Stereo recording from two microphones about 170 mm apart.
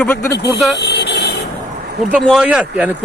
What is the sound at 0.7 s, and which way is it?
Vehicle, 75° left (ahead or behind).